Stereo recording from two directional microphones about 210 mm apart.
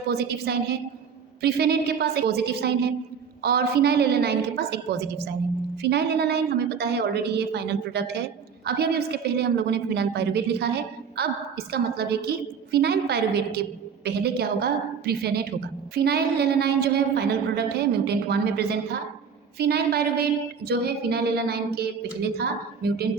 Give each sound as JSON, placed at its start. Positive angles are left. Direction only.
{"t": 0.1, "sound": "a woman's voice", "side_deg": -50}